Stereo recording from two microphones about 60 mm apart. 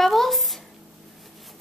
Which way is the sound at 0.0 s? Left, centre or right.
Centre.